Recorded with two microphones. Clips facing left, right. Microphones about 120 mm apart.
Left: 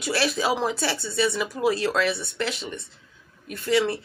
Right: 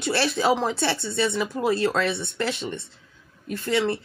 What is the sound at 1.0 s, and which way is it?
Speech, 25° right (ahead or behind).